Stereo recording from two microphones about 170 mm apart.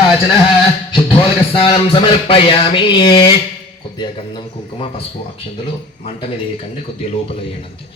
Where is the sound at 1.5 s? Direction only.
30° left (ahead or behind).